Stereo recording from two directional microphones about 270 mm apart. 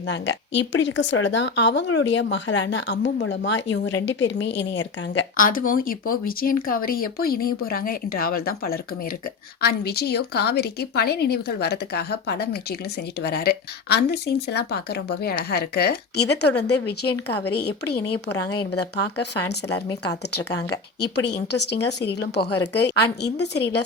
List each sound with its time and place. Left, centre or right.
0.1 s speech: left
21.2 s speech: left